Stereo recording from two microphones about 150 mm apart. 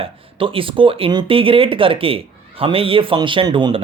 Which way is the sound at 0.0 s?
35° right (ahead or behind).